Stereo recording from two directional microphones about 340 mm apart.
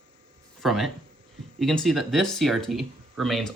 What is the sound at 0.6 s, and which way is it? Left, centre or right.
Speech, centre.